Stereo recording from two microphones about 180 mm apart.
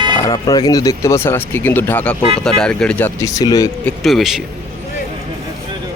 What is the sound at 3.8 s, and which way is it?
Speech, centre (ahead or behind).